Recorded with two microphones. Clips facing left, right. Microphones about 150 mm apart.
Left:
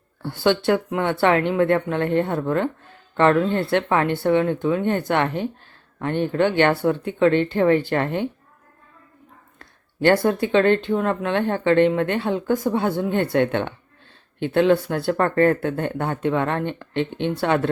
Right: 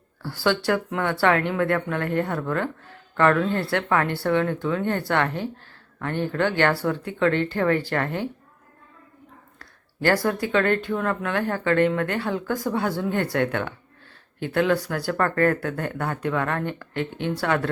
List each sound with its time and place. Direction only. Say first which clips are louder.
0.2 s speech: left 4 dB; 20° left (ahead or behind)
9.6 s speech: left 6 dB; 20° left (ahead or behind)